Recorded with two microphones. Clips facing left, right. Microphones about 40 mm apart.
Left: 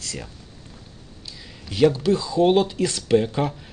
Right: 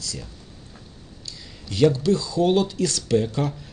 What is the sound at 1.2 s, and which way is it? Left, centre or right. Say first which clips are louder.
Speech: even; centre.